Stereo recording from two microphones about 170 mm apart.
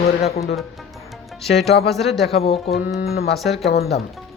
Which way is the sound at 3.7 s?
70° left (ahead or behind).